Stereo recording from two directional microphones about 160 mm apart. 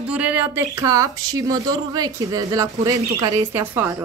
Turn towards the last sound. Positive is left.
turn(degrees=-15)  # may be behind; listen again after turning